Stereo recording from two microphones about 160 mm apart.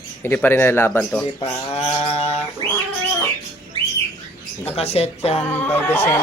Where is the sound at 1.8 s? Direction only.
40° left (ahead or behind).